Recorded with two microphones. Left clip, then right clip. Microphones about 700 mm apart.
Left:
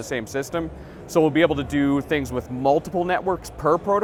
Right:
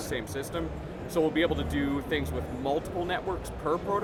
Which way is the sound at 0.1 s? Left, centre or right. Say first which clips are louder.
Left 9 dB; left.